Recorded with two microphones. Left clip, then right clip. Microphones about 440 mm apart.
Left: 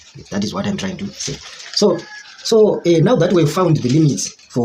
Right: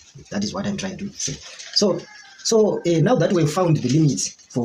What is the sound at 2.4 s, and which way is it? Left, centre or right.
Speech, right.